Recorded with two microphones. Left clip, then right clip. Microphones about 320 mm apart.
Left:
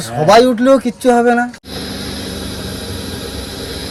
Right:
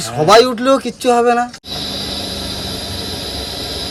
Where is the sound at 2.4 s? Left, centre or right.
Centre.